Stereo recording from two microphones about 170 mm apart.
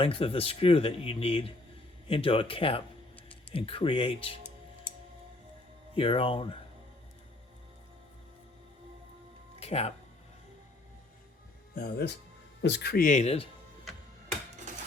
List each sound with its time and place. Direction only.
0.0 s speech: 35° left (ahead or behind)
5.9 s speech: 30° left (ahead or behind)
9.6 s music: 40° left (ahead or behind)
11.7 s speech: 65° left (ahead or behind)
12.6 s speech: 80° left; by 13.5 s 35° left (ahead or behind)